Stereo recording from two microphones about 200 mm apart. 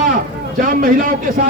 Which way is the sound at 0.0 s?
40° right (ahead or behind).